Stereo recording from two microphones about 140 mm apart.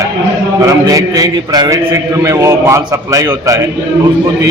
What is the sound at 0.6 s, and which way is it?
A man's voice, 25° right (ahead or behind).